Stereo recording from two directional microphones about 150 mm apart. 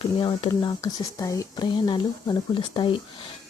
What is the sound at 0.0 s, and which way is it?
Speech, 35° left (ahead or behind).